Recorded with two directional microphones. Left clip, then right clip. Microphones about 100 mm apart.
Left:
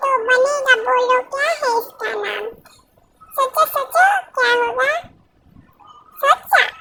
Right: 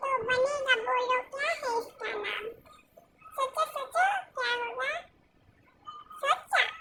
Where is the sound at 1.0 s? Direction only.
85° left.